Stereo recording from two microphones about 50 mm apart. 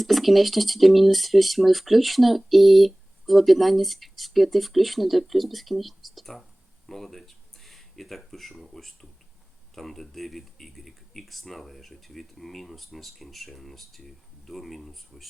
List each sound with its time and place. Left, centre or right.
0.0 s speech: centre